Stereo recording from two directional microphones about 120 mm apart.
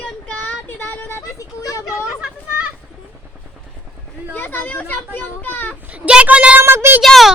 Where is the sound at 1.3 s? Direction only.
30° left (ahead or behind).